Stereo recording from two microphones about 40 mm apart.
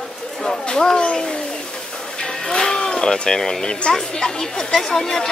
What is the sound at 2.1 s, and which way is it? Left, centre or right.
Music, centre.